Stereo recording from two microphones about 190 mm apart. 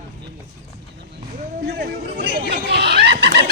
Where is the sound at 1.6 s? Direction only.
55° right (ahead or behind).